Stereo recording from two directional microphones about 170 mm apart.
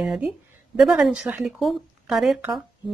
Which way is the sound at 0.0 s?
Centre (ahead or behind).